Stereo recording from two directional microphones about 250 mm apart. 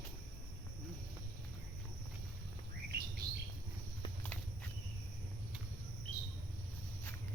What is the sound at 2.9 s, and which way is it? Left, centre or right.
Bird, right.